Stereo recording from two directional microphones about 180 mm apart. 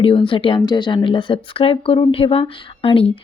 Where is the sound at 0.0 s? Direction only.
30° left (ahead or behind).